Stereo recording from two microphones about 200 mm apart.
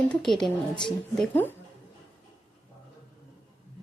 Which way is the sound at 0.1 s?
Centre (ahead or behind).